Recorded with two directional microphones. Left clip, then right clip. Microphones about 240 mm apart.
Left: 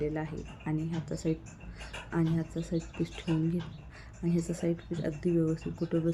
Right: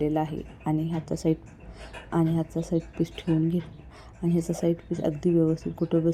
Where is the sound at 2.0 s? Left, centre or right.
Centre.